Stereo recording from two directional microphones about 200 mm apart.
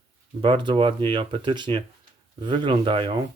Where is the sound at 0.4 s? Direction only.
25° right (ahead or behind).